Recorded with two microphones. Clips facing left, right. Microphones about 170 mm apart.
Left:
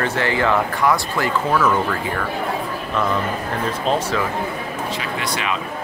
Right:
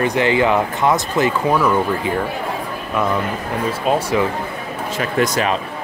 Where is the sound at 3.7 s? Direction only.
10° right (ahead or behind).